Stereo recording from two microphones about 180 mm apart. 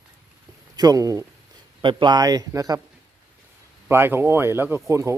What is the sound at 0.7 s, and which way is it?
Speech, 20° right (ahead or behind).